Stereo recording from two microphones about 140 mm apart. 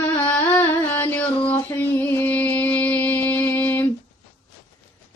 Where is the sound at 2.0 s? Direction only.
15° left (ahead or behind).